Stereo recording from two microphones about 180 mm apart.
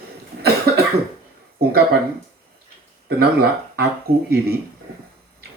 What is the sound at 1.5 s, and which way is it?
Speech, 60° right (ahead or behind).